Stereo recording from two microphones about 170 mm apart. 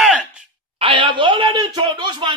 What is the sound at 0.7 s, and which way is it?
Speech, 30° right (ahead or behind).